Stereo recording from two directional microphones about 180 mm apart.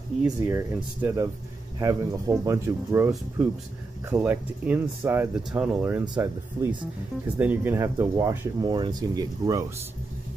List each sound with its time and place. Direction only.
0.2 s speech: 10° right (ahead or behind)
7.3 s speech: 10° right (ahead or behind)